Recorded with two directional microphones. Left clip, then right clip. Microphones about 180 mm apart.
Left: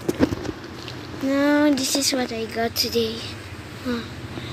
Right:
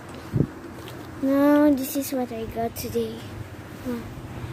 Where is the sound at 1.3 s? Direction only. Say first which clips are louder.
Even; 25° right (ahead or behind).